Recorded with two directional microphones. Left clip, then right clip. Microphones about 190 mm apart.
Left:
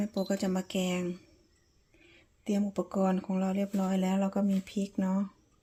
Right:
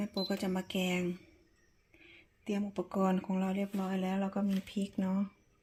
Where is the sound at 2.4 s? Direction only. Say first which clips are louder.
Left 5 dB; 20° left (ahead or behind).